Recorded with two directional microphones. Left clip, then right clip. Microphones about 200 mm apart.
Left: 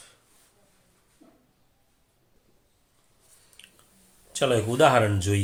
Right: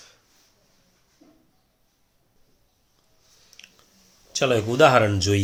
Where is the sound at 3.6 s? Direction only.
30° right (ahead or behind).